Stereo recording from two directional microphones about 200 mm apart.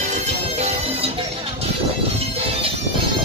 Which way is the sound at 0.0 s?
35° right (ahead or behind).